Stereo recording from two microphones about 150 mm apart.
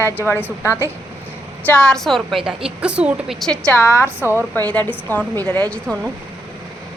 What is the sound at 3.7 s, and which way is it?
Speech, 15° left (ahead or behind).